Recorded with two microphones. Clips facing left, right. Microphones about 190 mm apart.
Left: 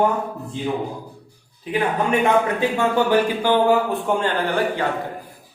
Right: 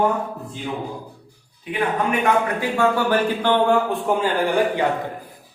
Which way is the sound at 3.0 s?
10° left (ahead or behind).